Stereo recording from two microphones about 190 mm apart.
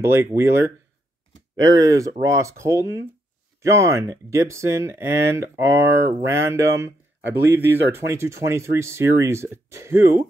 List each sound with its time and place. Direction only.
0.0 s speech: 15° right (ahead or behind)
1.8 s speech: 15° right (ahead or behind)